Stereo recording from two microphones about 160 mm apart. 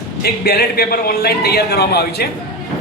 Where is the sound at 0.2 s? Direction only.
75° left (ahead or behind).